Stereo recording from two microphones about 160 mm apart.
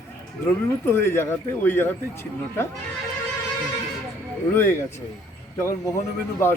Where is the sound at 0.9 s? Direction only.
15° left (ahead or behind).